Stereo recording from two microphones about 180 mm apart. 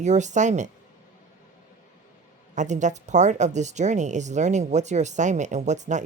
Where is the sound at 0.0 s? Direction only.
40° right (ahead or behind).